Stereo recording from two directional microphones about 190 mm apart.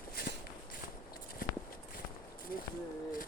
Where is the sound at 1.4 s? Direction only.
50° left (ahead or behind).